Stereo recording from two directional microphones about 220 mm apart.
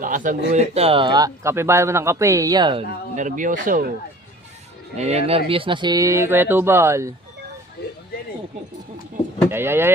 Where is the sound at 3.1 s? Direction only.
35° right (ahead or behind).